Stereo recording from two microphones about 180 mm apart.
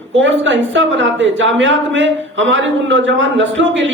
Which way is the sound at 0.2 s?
90° right.